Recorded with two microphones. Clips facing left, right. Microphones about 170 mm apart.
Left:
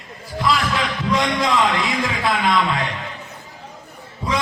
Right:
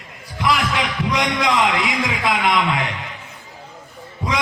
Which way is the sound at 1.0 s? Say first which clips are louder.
Left 1 dB; 15° right (ahead or behind).